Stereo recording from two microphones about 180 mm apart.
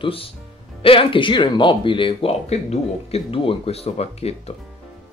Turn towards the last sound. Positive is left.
turn(degrees=35)  # may be behind; listen again after turning